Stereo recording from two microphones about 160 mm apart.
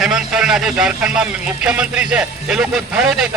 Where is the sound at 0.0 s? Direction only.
5° right (ahead or behind).